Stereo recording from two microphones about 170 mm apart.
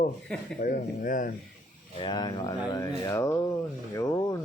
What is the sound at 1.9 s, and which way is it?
Speech, 30° left (ahead or behind).